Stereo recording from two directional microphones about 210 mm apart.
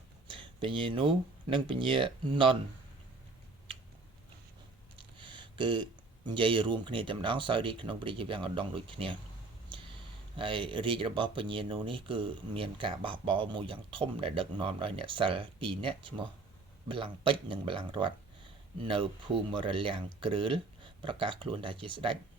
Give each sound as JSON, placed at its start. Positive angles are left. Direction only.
{"t": 0.3, "sound": "speech", "side_deg": -25}
{"t": 4.9, "sound": "speech", "side_deg": -25}